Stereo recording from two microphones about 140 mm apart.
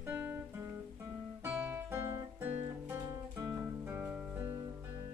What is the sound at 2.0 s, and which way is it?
Guitar, 20° right (ahead or behind).